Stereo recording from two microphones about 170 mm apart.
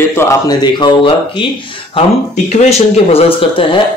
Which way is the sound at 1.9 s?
40° left (ahead or behind).